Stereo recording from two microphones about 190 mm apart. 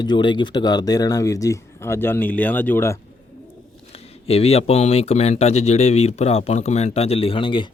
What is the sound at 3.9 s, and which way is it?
Speech, 30° left (ahead or behind).